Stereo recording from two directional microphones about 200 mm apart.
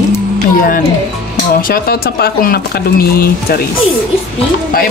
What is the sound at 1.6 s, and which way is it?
Speech, 50° left (ahead or behind).